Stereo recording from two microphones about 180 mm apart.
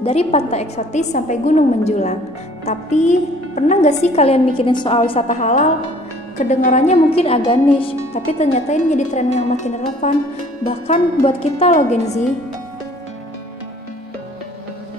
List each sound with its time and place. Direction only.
0.0 s a woman's voice: 35° left (ahead or behind)
11.2 s a woman's voice: 30° left (ahead or behind)